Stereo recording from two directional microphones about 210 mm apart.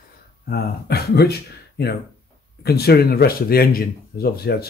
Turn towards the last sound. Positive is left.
turn(degrees=45)  # may be behind; listen again after turning